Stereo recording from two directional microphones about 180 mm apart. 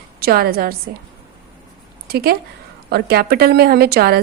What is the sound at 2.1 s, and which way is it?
A woman's voice, 60° right (ahead or behind).